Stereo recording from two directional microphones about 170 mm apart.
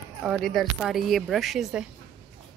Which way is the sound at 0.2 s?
Centre (ahead or behind).